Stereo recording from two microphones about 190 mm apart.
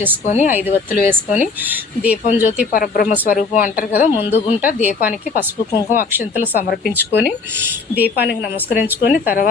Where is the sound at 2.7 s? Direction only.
45° left (ahead or behind).